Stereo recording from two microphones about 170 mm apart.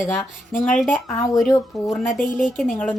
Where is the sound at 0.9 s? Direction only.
15° left (ahead or behind).